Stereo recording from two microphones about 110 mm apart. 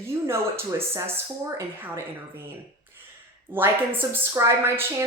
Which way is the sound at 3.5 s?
20° right (ahead or behind).